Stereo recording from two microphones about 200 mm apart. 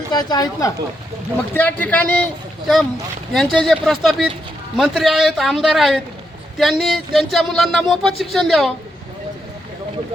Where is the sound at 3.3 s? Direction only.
Centre (ahead or behind).